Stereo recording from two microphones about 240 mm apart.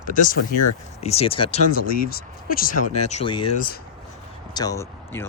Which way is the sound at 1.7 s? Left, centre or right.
Left.